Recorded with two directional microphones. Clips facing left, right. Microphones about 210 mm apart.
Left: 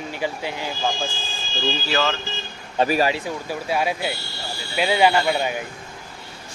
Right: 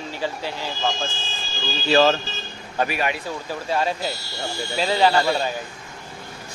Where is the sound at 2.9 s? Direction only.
35° left (ahead or behind).